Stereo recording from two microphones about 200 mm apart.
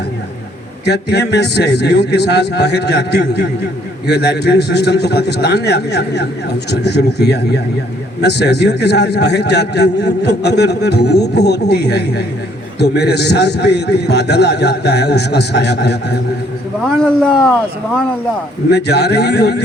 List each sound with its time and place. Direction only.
0.9 s a man's voice: 55° left (ahead or behind)
16.8 s a man's voice: 5° left (ahead or behind)
18.7 s a man's voice: 55° left (ahead or behind)